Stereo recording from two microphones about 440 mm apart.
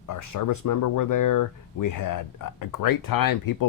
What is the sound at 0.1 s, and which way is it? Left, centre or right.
Speech, left.